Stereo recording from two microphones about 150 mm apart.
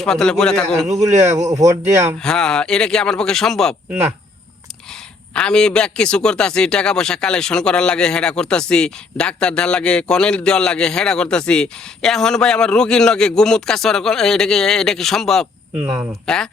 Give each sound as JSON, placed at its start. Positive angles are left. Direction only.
{"t": 0.0, "sound": "a man's voice", "side_deg": 5}
{"t": 1.1, "sound": "speech", "side_deg": -50}
{"t": 1.4, "sound": "speech", "side_deg": -20}
{"t": 2.2, "sound": "a man's voice", "side_deg": 5}
{"t": 5.3, "sound": "a man's voice", "side_deg": 5}